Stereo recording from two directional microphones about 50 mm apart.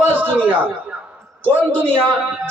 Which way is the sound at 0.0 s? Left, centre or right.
Right.